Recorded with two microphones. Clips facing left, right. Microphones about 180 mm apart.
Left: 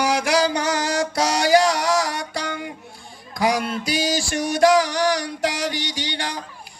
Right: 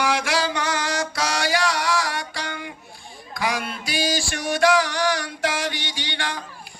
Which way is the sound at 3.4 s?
40° left (ahead or behind).